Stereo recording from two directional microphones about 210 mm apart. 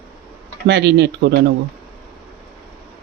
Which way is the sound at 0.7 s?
55° right (ahead or behind).